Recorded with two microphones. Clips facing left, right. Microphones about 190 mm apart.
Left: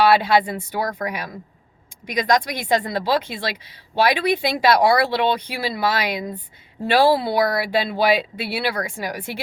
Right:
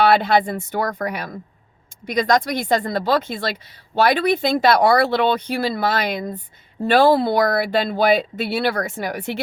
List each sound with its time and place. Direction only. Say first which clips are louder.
0.1 s speech: right 1 dB; 50° right (ahead or behind)